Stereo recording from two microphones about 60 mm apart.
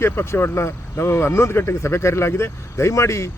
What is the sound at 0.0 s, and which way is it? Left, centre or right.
Speech, left.